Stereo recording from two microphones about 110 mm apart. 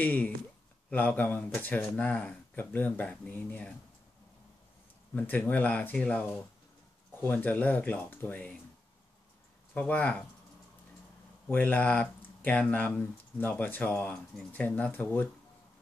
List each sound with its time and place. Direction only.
0.0 s speech: 15° left (ahead or behind)
5.1 s speech: 15° left (ahead or behind)
9.8 s speech: 15° left (ahead or behind)
11.4 s speech: 15° left (ahead or behind)